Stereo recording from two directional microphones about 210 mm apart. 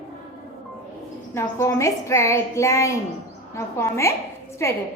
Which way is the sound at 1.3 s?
10° left (ahead or behind).